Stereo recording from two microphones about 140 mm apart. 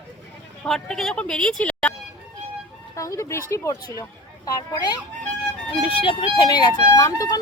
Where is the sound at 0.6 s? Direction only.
5° left (ahead or behind).